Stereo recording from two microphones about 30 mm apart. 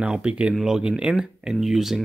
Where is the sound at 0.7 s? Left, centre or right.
Right.